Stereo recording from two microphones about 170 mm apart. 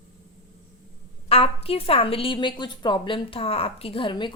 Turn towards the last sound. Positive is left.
turn(degrees=30)  # may be behind; listen again after turning